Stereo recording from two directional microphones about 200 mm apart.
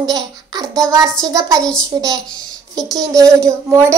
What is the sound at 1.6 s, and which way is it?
Speech, 5° left (ahead or behind).